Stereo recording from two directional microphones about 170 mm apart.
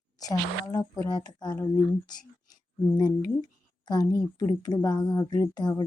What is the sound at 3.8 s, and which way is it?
Speech, 25° left (ahead or behind).